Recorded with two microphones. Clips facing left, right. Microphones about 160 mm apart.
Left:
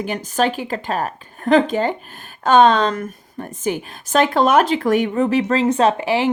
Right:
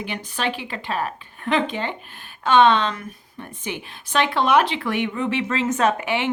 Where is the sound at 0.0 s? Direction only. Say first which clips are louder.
Left 7 dB; 45° left (ahead or behind).